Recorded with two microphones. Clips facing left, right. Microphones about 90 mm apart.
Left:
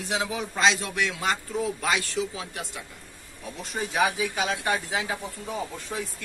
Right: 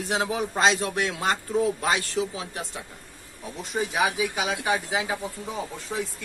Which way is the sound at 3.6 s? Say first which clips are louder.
Even; 15° right (ahead or behind).